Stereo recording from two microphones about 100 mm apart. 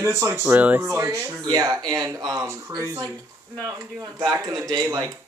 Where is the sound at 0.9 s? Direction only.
30° right (ahead or behind).